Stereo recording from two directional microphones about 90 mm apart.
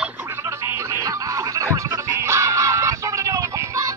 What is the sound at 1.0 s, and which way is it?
Music, 40° right (ahead or behind).